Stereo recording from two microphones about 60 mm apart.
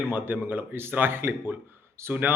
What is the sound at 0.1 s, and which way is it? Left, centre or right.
Speech, right.